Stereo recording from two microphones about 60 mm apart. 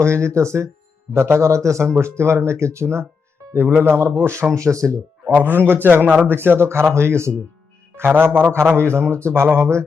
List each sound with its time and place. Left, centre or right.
0.0 s a man's voice: right
3.5 s a man's voice: right
4.5 s a man's voice: right
5.2 s a man's voice: right
8.4 s a man's voice: centre
8.7 s speech: right